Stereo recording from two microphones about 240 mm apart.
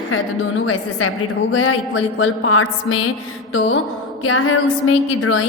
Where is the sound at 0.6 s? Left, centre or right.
Left.